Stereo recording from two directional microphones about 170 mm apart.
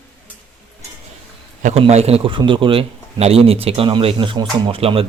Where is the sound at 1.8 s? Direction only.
40° right (ahead or behind).